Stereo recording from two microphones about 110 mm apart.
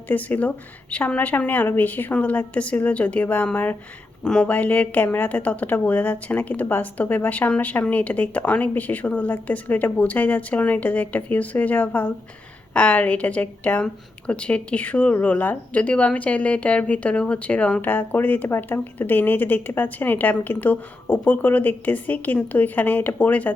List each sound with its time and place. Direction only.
0.1 s a woman's voice: 15° left (ahead or behind)